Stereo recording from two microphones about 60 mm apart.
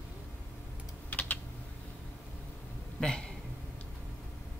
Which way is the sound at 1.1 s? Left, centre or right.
Left.